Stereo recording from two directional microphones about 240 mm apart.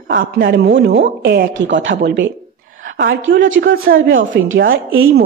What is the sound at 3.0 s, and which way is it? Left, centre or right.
Speech, right.